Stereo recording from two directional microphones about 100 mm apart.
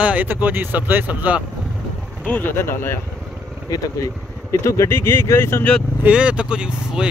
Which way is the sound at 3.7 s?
35° left (ahead or behind).